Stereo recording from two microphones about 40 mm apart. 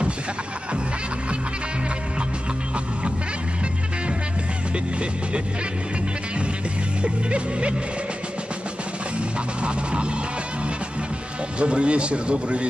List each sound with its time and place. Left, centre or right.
7.0 s music: right
9.6 s music: right
11.6 s a man's voice: right